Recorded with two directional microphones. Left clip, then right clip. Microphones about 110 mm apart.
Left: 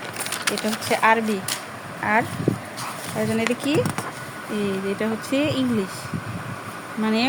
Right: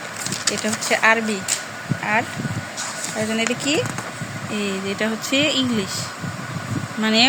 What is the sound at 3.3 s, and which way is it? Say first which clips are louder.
Speech: right 1 dB; 15° left (ahead or behind).